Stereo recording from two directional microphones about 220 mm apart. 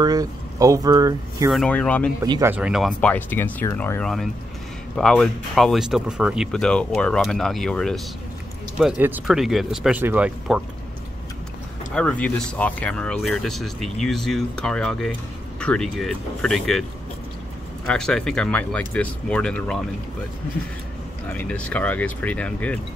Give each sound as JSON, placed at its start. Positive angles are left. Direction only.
{"t": 0.0, "sound": "speech", "side_deg": -15}
{"t": 1.5, "sound": "speech", "side_deg": 5}
{"t": 2.2, "sound": "speech", "side_deg": -20}
{"t": 2.5, "sound": "speech", "side_deg": -5}
{"t": 11.9, "sound": "speech", "side_deg": 5}
{"t": 17.8, "sound": "speech", "side_deg": 5}
{"t": 21.3, "sound": "speech", "side_deg": 5}